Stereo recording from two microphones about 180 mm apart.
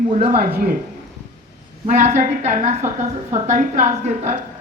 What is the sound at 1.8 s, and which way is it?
A woman's voice, 40° right (ahead or behind).